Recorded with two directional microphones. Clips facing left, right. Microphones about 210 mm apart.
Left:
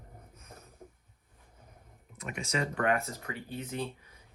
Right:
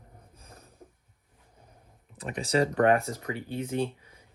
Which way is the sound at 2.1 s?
35° right (ahead or behind).